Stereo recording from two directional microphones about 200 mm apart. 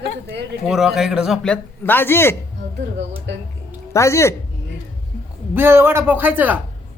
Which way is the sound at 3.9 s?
15° left (ahead or behind).